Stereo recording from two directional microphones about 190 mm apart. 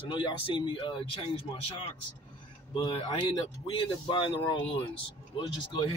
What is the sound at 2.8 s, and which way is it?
Speech, 30° left (ahead or behind).